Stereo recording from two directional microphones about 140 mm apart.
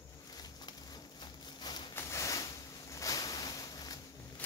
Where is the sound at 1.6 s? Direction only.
30° left (ahead or behind).